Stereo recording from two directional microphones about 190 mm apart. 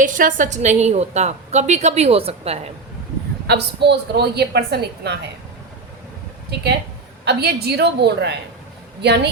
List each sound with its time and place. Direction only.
0.0 s a woman's voice: 45° right (ahead or behind)
3.4 s a woman's voice: 60° right (ahead or behind)
7.3 s a woman's voice: 60° right (ahead or behind)